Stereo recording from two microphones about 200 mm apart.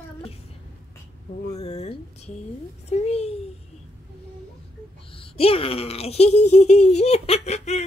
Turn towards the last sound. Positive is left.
turn(degrees=30)  # may be behind; listen again after turning